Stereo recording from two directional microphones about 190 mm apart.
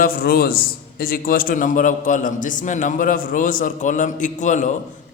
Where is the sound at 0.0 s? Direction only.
50° left (ahead or behind).